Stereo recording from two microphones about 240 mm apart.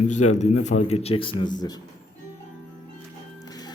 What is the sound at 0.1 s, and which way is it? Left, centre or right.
A man's voice, left.